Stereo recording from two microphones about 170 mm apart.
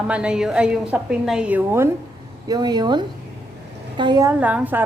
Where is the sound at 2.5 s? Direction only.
25° right (ahead or behind).